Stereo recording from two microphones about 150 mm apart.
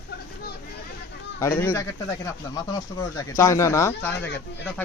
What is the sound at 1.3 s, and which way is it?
A man's voice, 15° left (ahead or behind).